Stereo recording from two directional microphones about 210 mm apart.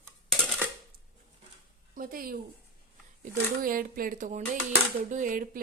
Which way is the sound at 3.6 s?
45° right (ahead or behind).